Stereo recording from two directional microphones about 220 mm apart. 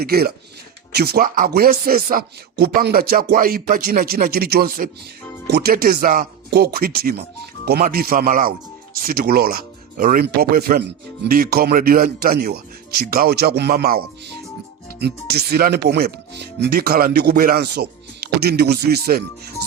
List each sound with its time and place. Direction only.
0.0 s speech: 45° right (ahead or behind)